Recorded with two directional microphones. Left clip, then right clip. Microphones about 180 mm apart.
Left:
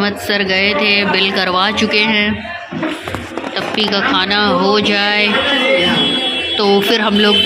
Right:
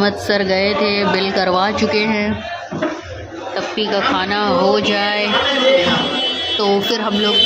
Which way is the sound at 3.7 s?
5° right (ahead or behind).